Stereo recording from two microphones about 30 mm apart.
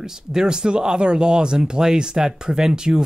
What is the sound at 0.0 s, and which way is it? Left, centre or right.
Speech, right.